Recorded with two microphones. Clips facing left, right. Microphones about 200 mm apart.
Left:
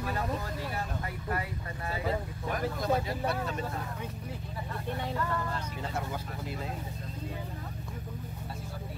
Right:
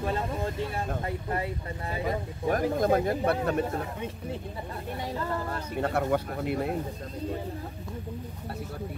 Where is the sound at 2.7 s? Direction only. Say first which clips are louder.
Right 6 dB; 50° right (ahead or behind).